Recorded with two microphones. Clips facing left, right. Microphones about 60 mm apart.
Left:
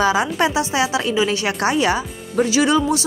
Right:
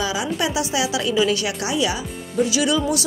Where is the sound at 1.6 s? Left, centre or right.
Left.